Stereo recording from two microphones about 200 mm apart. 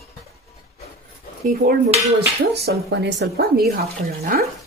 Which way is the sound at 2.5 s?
55° right (ahead or behind).